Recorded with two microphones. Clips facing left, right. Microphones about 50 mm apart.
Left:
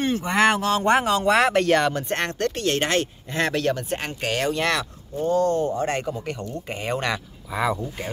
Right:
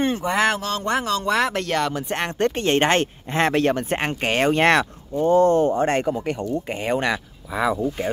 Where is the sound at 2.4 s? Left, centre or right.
Right.